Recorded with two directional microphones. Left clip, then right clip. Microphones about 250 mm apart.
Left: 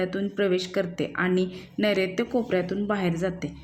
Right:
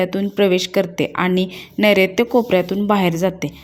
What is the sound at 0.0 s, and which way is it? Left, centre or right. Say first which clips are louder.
A woman's voice: right 9 dB; right.